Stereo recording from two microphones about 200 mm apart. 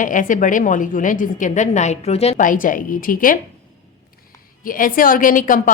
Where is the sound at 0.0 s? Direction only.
40° left (ahead or behind).